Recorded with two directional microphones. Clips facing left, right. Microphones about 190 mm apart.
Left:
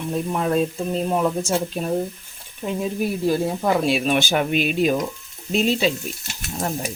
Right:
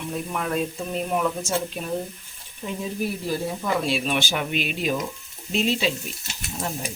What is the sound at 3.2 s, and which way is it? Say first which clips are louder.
Speech: left 9 dB; 50° left (ahead or behind).